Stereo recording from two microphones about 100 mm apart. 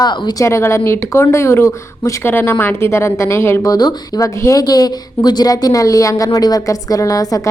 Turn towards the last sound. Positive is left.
turn(degrees=35)  # may be behind; listen again after turning